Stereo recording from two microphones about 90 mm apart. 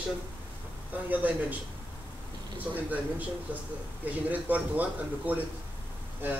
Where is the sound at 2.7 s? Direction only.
20° right (ahead or behind).